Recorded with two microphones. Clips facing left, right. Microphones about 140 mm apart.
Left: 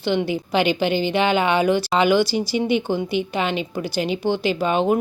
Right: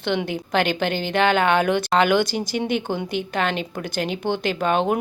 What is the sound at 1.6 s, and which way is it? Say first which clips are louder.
Speech: left 1 dB; 55° right (ahead or behind).